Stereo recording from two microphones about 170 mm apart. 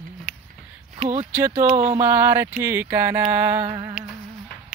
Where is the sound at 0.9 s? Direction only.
35° right (ahead or behind).